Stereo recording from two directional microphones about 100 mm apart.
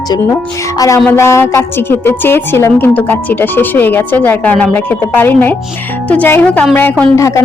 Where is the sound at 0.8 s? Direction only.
35° left (ahead or behind); by 6.7 s 20° left (ahead or behind).